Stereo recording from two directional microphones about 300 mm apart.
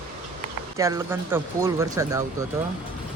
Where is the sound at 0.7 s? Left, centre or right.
Centre.